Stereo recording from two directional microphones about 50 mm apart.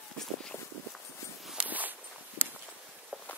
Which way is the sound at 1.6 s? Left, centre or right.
Right.